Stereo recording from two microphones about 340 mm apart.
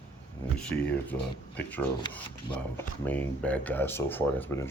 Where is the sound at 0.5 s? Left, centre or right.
Centre.